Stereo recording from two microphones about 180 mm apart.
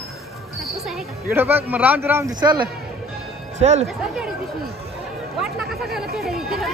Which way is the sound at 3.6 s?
40° right (ahead or behind).